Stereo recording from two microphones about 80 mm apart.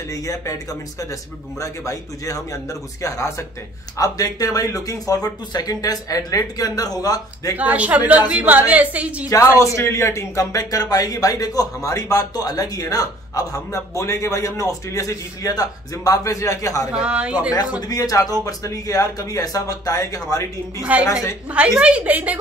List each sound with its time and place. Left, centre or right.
0.1 s speech: left
1.6 s speech: left
4.0 s speech: left
7.5 s a woman's voice: centre
9.8 s speech: left
16.9 s a woman's voice: centre
17.7 s speech: left
20.8 s a woman's voice: centre
21.1 s speech: left
21.5 s a woman's voice: centre